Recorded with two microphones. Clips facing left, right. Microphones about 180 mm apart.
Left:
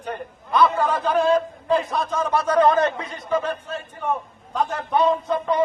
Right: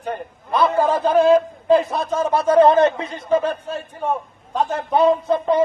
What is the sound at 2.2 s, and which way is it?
A man's voice, 30° right (ahead or behind).